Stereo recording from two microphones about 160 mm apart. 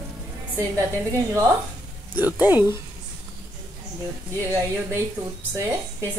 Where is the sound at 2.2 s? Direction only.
10° right (ahead or behind).